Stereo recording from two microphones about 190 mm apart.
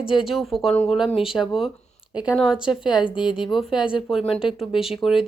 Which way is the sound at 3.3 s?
5° right (ahead or behind).